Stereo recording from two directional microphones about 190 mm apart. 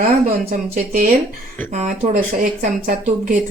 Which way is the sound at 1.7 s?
40° right (ahead or behind).